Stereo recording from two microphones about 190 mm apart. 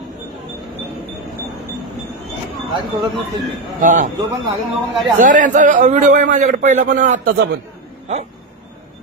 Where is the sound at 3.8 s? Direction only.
45° right (ahead or behind).